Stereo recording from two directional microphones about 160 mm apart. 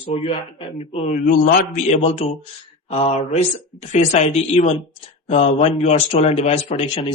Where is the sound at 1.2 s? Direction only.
65° left (ahead or behind); by 2.2 s 40° left (ahead or behind).